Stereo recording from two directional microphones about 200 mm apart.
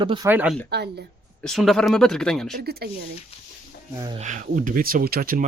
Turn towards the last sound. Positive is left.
turn(degrees=-50)  # may be behind; listen again after turning